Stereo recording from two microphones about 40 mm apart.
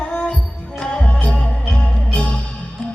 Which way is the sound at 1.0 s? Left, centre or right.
Left.